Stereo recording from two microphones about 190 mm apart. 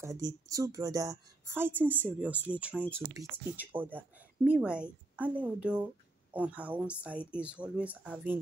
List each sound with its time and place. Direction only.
0.0 s a woman's voice: 15° right (ahead or behind)